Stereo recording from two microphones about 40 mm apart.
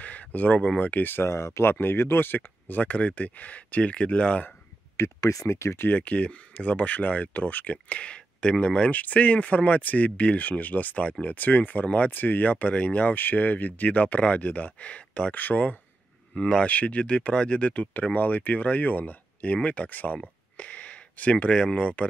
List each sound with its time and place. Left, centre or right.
0.0 s a sound: left
0.7 s speech: left
1.1 s speech: left
2.8 s speech: left
5.9 s speech: left
7.7 s speech: left
11.3 s speech: left
12.1 s speech: left
15.3 s speech: left
16.3 s speech: left
20.5 s a sound: left
21.7 s speech: left